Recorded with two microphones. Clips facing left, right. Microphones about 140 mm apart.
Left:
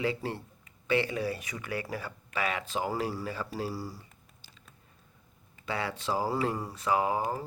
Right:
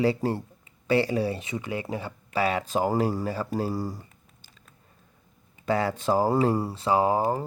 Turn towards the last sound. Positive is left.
turn(degrees=-40)  # may be behind; listen again after turning